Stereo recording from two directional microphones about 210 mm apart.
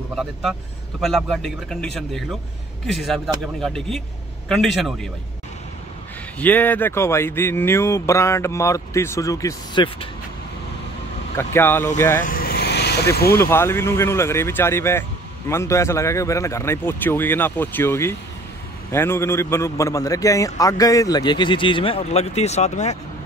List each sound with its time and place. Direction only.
0.1 s speech: centre (ahead or behind)
2.9 s speech: centre (ahead or behind)
6.4 s speech: 10° left (ahead or behind)
11.3 s speech: 10° left (ahead or behind)
12.3 s vehicle: 45° left (ahead or behind)
13.4 s speech: 10° left (ahead or behind); by 22.9 s 30° left (ahead or behind)